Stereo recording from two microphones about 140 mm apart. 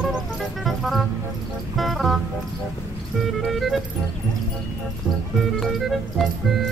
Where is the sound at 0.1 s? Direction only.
Centre (ahead or behind).